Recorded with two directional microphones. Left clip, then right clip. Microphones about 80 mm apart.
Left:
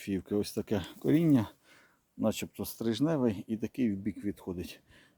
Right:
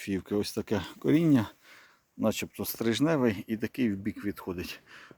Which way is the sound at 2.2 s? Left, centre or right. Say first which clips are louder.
Right 3 dB; centre.